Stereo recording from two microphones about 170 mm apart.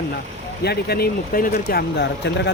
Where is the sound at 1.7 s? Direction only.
70° left (ahead or behind); by 2.5 s 85° left.